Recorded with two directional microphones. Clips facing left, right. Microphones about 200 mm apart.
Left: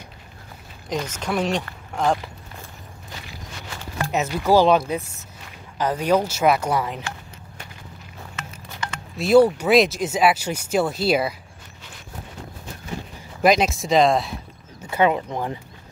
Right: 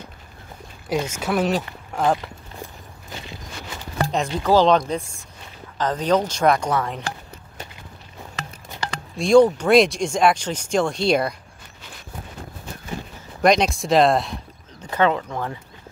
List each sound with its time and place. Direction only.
0.8 s speech: 10° right (ahead or behind)
4.4 s speech: 10° left (ahead or behind)
8.4 s a sound: 35° right (ahead or behind)
9.1 s speech: 5° left (ahead or behind)
13.4 s speech: 5° left (ahead or behind)